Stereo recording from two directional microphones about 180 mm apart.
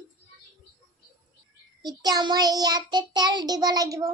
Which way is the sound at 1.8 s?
20° right (ahead or behind).